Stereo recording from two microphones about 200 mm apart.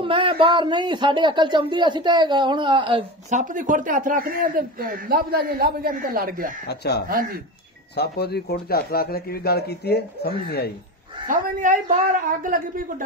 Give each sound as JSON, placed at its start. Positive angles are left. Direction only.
{"t": 0.0, "sound": "a man's voice", "side_deg": -25}
{"t": 3.3, "sound": "a man's voice", "side_deg": -40}
{"t": 6.7, "sound": "speech", "side_deg": 55}
{"t": 11.2, "sound": "a man's voice", "side_deg": -40}